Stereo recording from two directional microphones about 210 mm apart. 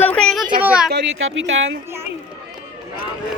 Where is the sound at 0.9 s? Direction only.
60° right (ahead or behind).